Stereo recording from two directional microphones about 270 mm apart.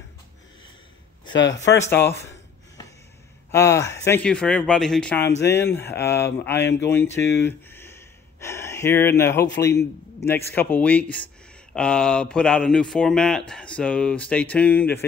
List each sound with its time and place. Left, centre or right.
1.3 s speech: left
1.6 s speech: centre
3.5 s speech: centre
7.3 s a sound: centre
10.2 s speech: centre